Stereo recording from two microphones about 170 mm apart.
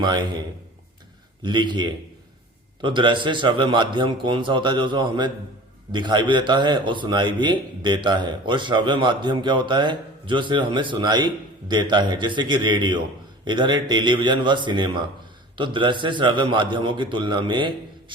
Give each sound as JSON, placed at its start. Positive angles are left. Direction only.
{"t": 1.4, "sound": "a man's voice", "side_deg": -25}